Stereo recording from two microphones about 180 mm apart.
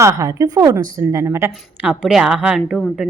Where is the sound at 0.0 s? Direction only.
20° right (ahead or behind).